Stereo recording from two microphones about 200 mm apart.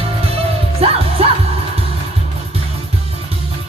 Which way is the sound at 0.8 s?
30° right (ahead or behind).